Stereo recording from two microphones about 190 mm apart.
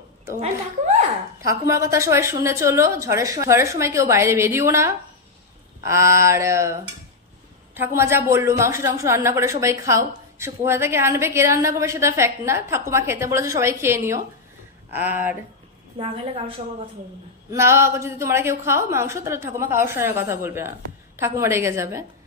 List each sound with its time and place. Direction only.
0.4 s speech: 35° right (ahead or behind)
1.4 s a woman's voice: 15° right (ahead or behind)
16.0 s a woman's voice: 30° right (ahead or behind)
17.5 s a woman's voice: 15° right (ahead or behind)